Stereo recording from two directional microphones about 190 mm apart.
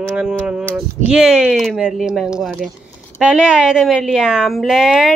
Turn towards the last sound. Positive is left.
turn(degrees=0)  # may be behind; listen again after turning